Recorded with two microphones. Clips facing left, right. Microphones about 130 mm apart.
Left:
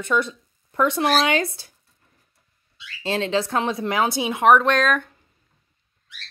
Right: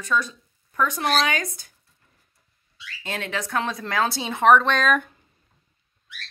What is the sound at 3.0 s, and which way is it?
A woman's voice, 25° left (ahead or behind).